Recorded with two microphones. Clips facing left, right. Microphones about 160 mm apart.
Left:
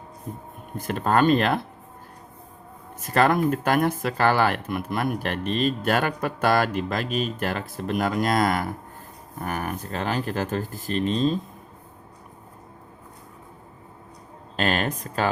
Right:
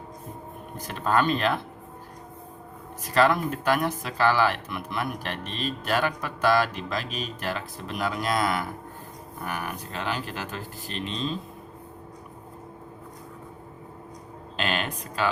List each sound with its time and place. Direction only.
0.8 s speech: 50° left (ahead or behind)
3.2 s speech: 50° left (ahead or behind)
14.5 s a sound: 45° left (ahead or behind)